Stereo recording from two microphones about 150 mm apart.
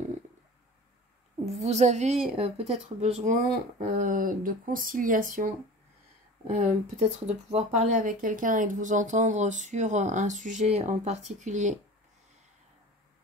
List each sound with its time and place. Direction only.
1.5 s speech: 45° right (ahead or behind)
3.9 s speech: 60° right (ahead or behind)
6.5 s speech: 55° right (ahead or behind)
7.9 s speech: 65° right (ahead or behind)